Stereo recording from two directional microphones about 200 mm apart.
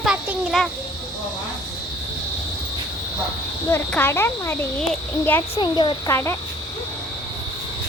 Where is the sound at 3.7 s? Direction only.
10° left (ahead or behind).